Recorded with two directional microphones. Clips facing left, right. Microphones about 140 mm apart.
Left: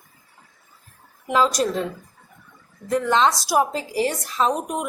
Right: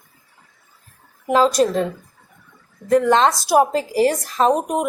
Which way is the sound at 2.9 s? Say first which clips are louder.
Right 4 dB; 45° right (ahead or behind).